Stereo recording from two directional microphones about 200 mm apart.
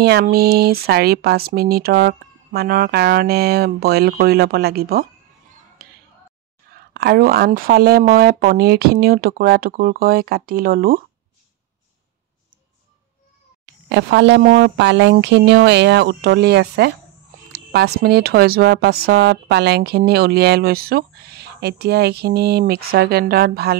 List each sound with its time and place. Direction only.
0.0 s speech: 55° right (ahead or behind)
5.8 s a sound: 50° right (ahead or behind)
6.7 s speech: 55° right (ahead or behind)
13.8 s speech: 60° right (ahead or behind)